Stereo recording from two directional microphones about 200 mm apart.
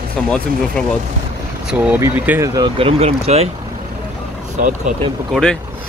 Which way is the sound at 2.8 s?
30° right (ahead or behind).